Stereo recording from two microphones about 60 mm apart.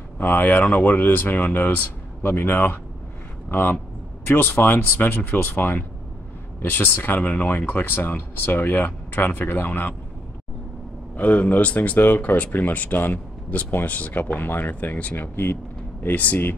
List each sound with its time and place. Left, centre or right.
0.2 s a man's voice: left
11.1 s speech: left
15.1 s speech: left